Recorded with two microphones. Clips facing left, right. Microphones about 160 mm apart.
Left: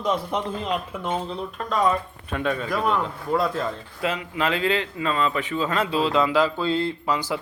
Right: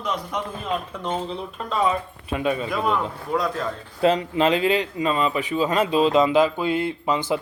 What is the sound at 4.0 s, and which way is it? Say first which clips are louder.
Speech: right 8 dB; 35° right (ahead or behind).